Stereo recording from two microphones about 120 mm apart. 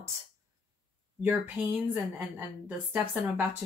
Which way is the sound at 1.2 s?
15° right (ahead or behind).